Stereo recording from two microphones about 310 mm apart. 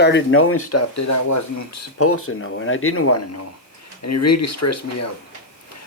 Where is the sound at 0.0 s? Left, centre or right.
Left.